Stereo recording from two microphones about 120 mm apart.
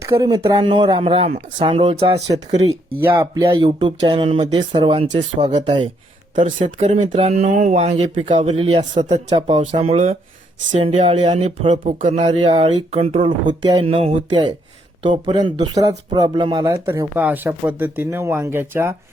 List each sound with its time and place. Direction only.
0.1 s speech: 35° right (ahead or behind); by 2.7 s 60° right (ahead or behind)
3.0 s speech: 15° right (ahead or behind)
3.3 s speech: 30° right (ahead or behind)
3.8 s speech: 45° right (ahead or behind)
5.5 s mantra: 70° right (ahead or behind)
7.1 s speech: 50° right (ahead or behind)
7.3 s mantra: 85° right
8.5 s speech: 55° right (ahead or behind)
8.8 s mantra: 75° right (ahead or behind)
9.8 s speech: 60° right (ahead or behind)
12.5 s speech: 55° right (ahead or behind)
13.2 s speech: 40° right (ahead or behind)
15.3 s speech: 40° right (ahead or behind)
16.8 s speech: 20° right (ahead or behind)